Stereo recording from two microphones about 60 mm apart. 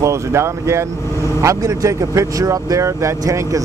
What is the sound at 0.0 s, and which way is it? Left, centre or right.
Speech, right.